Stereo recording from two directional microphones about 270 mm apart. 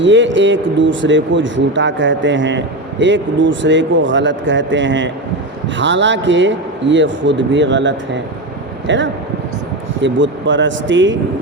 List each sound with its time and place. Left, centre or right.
0.0 s speech: right